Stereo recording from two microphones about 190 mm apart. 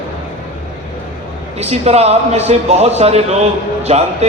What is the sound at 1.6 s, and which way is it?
A man's voice, 35° right (ahead or behind).